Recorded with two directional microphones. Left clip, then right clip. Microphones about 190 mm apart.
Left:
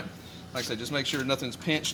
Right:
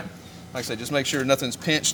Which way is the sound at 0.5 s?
30° right (ahead or behind).